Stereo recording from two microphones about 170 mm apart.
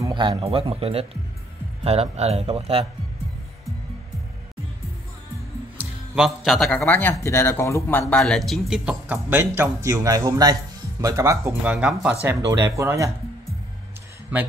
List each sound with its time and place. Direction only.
0.0 s speech: 25° right (ahead or behind)
5.8 s speech: 5° right (ahead or behind)